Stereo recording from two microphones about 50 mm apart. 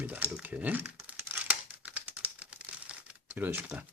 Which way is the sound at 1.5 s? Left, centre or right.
Right.